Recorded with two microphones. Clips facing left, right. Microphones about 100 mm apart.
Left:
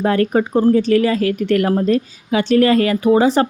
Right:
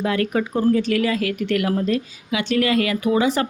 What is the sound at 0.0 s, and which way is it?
Speech, 40° left (ahead or behind).